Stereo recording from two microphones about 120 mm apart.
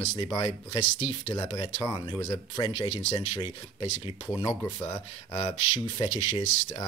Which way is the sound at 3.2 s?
50° left (ahead or behind).